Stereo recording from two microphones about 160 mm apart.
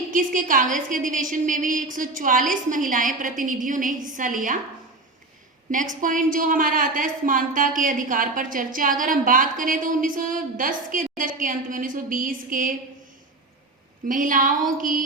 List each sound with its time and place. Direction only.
0.1 s a woman's voice: 55° right (ahead or behind)
5.7 s a woman's voice: 55° right (ahead or behind)
14.1 s a woman's voice: 55° right (ahead or behind)